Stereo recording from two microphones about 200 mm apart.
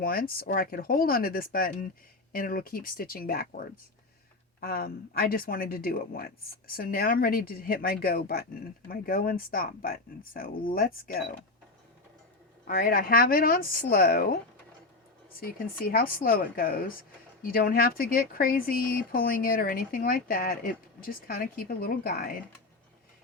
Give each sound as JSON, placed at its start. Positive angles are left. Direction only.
{"t": 0.0, "sound": "speech", "side_deg": 45}
{"t": 12.6, "sound": "speech", "side_deg": 45}
{"t": 15.4, "sound": "speech", "side_deg": 45}